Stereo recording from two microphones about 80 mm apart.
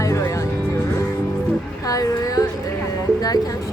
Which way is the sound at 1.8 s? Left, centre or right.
Left.